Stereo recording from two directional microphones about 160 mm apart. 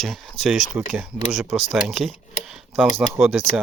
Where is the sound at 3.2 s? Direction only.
Centre (ahead or behind).